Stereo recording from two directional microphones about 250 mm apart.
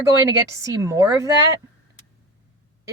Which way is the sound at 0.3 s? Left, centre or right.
Centre.